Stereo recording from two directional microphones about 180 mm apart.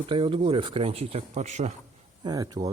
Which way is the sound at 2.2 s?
20° right (ahead or behind).